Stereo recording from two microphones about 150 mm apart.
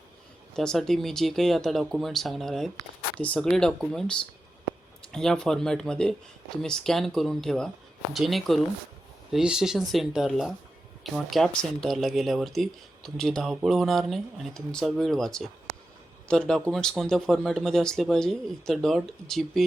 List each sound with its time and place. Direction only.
0.5 s speech: 5° left (ahead or behind)